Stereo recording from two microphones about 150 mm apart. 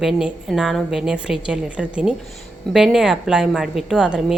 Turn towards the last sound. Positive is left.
turn(degrees=-5)  # may be behind; listen again after turning